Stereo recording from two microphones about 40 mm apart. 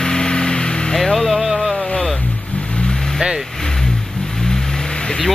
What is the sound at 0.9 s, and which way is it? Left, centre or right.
Music, centre.